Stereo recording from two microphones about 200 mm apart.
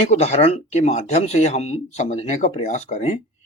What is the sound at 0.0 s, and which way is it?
Speech, 35° left (ahead or behind).